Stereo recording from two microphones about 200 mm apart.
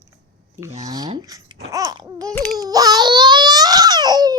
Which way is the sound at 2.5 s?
20° right (ahead or behind).